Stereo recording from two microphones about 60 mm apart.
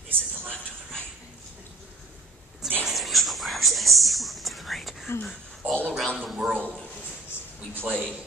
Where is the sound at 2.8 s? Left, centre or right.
Centre.